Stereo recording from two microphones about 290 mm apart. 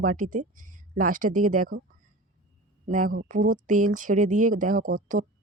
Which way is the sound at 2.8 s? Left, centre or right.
Right.